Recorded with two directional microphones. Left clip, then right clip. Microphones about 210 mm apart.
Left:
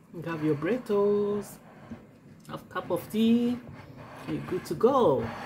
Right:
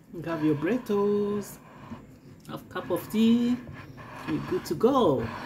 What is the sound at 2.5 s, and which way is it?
Speech, 5° right (ahead or behind).